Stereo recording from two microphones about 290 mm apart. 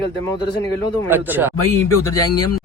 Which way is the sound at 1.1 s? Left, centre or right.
Centre.